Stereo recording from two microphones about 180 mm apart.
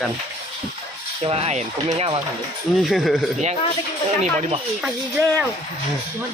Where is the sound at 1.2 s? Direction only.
35° right (ahead or behind).